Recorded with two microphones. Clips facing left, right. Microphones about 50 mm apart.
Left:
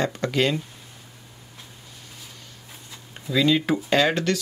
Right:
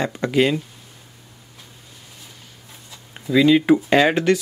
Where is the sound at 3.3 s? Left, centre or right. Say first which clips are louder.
Right 6 dB; centre.